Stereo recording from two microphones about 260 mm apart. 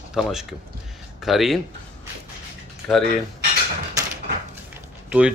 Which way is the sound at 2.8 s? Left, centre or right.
Centre.